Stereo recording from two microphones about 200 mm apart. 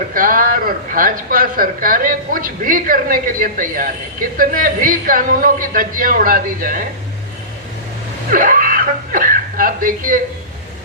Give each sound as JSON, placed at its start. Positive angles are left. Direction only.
{"t": 0.1, "sound": "a man's voice", "side_deg": -45}
{"t": 8.3, "sound": "speech", "side_deg": -45}